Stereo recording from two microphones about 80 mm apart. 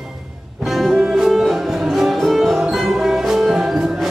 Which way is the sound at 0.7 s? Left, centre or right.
Centre.